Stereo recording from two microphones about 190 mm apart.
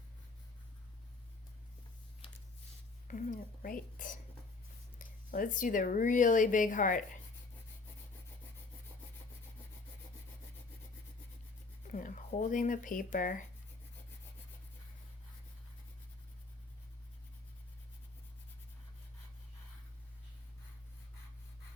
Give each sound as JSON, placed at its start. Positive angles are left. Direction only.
{"t": 3.1, "sound": "speech", "side_deg": 45}
{"t": 11.9, "sound": "speech", "side_deg": 40}